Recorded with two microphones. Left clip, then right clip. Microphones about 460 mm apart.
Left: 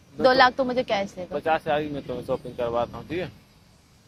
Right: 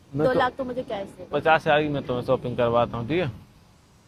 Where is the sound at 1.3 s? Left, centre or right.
Right.